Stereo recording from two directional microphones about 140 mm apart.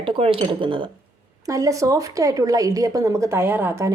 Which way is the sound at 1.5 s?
25° right (ahead or behind).